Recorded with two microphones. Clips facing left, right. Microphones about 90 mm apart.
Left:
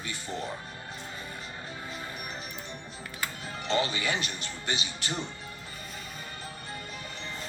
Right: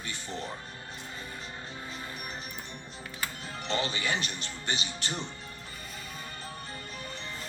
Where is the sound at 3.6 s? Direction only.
15° left (ahead or behind).